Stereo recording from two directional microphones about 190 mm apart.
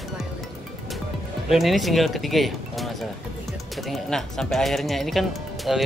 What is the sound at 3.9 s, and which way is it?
Speech, centre (ahead or behind).